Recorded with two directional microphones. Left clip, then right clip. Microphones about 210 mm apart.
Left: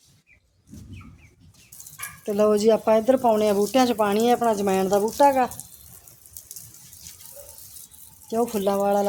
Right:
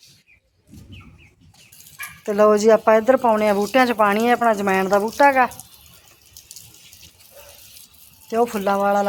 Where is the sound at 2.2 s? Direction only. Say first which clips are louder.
Right 5 dB; 5° right (ahead or behind).